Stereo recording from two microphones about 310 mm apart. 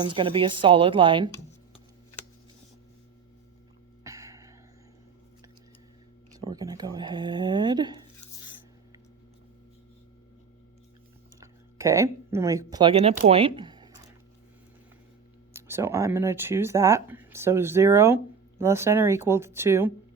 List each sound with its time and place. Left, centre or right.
0.0 s speech: centre
4.0 s a sound: centre
6.3 s speech: centre
11.3 s speech: centre
13.2 s a sound: centre
15.5 s speech: centre